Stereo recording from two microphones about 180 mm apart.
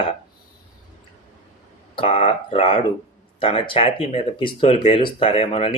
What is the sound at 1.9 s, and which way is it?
Speech, 30° left (ahead or behind).